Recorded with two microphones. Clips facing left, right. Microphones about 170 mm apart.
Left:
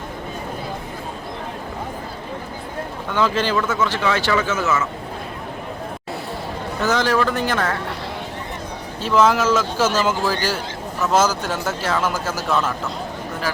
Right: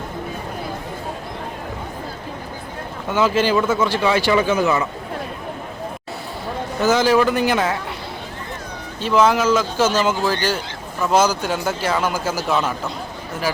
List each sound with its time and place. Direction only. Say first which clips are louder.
3.1 s speech: right 3 dB; 10° right (ahead or behind)
3.6 s speech: right 3 dB; 30° right (ahead or behind)
3.8 s speech: right 3 dB; 10° right (ahead or behind)
6.8 s speech: right 4 dB; 5° right (ahead or behind)
7.5 s speech: right 2 dB; 15° right (ahead or behind)
9.0 s speech: right 1 dB; centre (ahead or behind)